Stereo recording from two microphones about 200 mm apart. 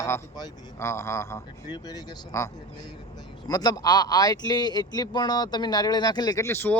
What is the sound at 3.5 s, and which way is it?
Speech, 20° left (ahead or behind).